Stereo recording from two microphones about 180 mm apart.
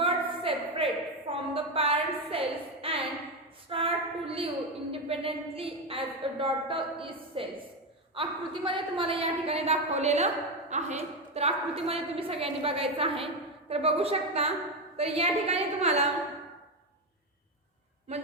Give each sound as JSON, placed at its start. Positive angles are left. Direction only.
{"t": 0.0, "sound": "a sound", "side_deg": -30}
{"t": 4.9, "sound": "a woman's voice", "side_deg": -30}
{"t": 18.1, "sound": "a woman's voice", "side_deg": -35}